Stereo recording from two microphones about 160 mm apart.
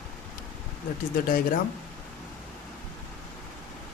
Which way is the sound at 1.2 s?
65° left (ahead or behind).